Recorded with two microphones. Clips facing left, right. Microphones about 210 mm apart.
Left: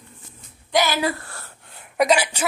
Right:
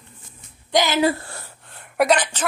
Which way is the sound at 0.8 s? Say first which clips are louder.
Right 3 dB; 20° right (ahead or behind).